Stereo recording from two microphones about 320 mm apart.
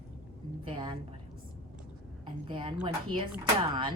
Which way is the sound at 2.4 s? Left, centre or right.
Centre.